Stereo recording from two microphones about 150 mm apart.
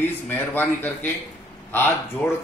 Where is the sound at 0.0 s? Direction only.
15° left (ahead or behind).